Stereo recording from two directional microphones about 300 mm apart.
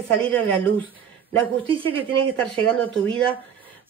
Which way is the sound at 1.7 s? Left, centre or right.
Centre.